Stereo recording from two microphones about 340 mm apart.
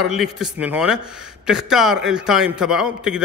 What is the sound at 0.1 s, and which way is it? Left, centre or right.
A man's voice, centre.